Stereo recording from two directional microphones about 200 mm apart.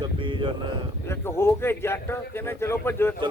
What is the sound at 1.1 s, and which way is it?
Speech, 10° left (ahead or behind).